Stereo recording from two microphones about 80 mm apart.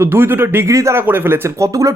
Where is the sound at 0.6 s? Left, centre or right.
Right.